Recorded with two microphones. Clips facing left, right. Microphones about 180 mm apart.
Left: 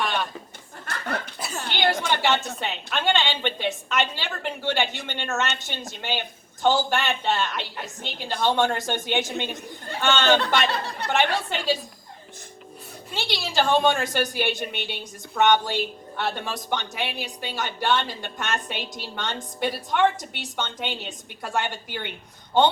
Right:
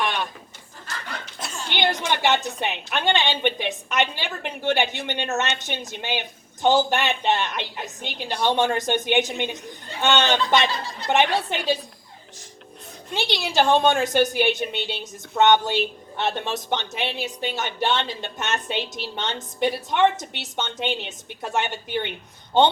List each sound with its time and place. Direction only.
0.9 s chuckle: 60° left (ahead or behind)
1.7 s a woman's voice: 20° right (ahead or behind)
10.3 s speech: 65° left (ahead or behind)
11.1 s speech: 20° right (ahead or behind)
13.1 s speech: 20° right (ahead or behind)